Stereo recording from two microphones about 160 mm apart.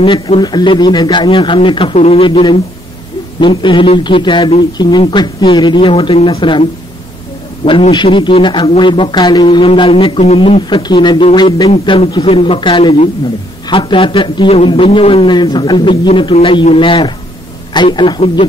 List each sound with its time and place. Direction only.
0.0 s a man's voice: 30° left (ahead or behind)